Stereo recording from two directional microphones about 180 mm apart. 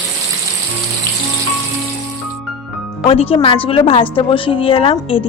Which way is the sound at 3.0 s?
30° left (ahead or behind).